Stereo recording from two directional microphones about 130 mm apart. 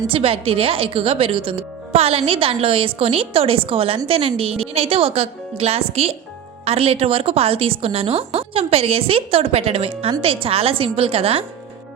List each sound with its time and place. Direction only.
0.1 s speech: 45° right (ahead or behind)